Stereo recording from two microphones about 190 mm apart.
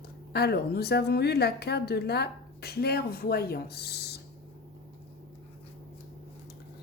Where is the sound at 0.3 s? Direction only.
55° left (ahead or behind).